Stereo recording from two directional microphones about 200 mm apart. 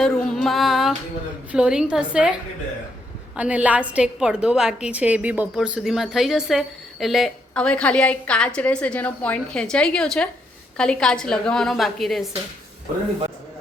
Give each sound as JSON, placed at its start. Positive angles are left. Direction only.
{"t": 0.0, "sound": "a sound", "side_deg": 0}
{"t": 1.5, "sound": "a woman's voice", "side_deg": -5}
{"t": 3.3, "sound": "a woman's voice", "side_deg": -5}